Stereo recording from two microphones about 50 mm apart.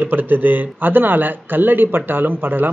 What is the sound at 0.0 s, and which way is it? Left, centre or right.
A man's voice, right.